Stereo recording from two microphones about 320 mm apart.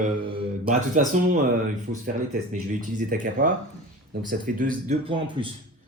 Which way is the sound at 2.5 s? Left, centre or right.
Right.